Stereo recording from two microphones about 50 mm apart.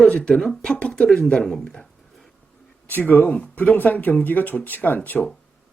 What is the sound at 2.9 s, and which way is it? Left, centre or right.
A man's voice, left.